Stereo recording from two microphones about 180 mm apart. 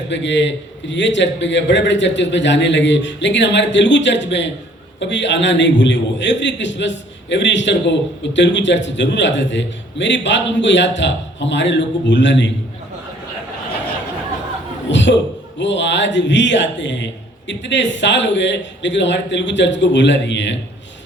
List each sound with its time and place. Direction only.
0.1 s a man's voice: 85° left
14.8 s a man's voice: 90° left